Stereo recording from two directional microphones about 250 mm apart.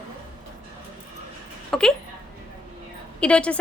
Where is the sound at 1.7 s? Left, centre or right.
Centre.